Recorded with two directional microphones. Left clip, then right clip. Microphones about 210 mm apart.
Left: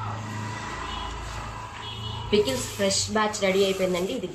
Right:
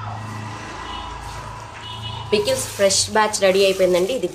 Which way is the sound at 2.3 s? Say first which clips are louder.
Right 4 dB; 55° right (ahead or behind).